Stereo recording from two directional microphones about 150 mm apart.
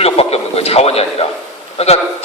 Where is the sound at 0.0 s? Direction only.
40° left (ahead or behind).